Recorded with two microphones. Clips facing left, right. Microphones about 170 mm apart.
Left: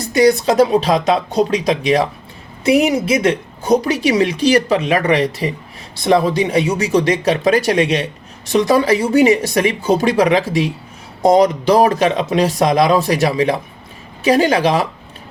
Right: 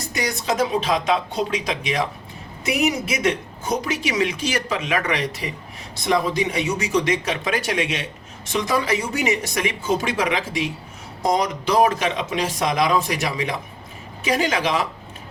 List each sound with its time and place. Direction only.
0.1 s speech: 35° left (ahead or behind)